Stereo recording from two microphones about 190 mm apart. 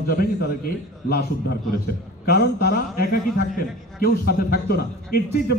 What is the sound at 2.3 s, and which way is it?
A man's voice, 55° left (ahead or behind).